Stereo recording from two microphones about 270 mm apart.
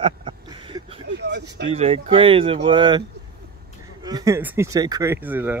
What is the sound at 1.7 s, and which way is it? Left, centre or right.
Speech, right.